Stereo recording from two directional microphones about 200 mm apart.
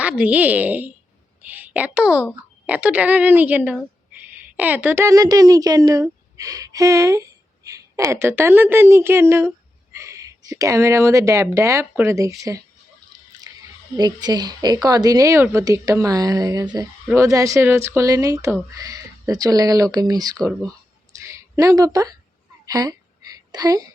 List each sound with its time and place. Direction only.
0.0 s a woman's voice: 5° right (ahead or behind)
13.9 s a woman's voice: 20° right (ahead or behind)
21.2 s a sound: 15° right (ahead or behind)